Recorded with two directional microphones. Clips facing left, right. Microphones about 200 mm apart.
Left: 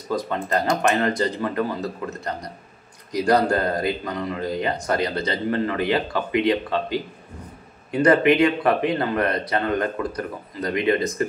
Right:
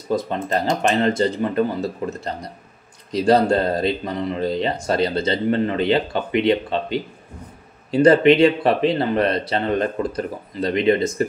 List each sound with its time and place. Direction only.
0.1 s speech: 25° right (ahead or behind)